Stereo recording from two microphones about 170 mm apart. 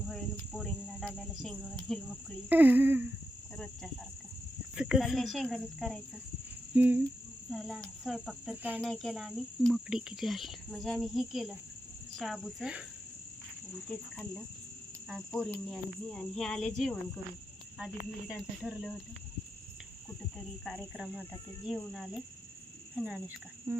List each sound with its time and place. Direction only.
0.1 s cricket: 5° left (ahead or behind)
2.5 s speech: 10° right (ahead or behind)
4.7 s cricket: 5° right (ahead or behind)
6.7 s speech: 10° right (ahead or behind)
7.5 s cricket: 5° left (ahead or behind)
13.9 s cricket: 10° left (ahead or behind)
18.3 s cricket: 5° left (ahead or behind)
20.7 s cricket: 5° right (ahead or behind)
23.7 s speech: 15° right (ahead or behind)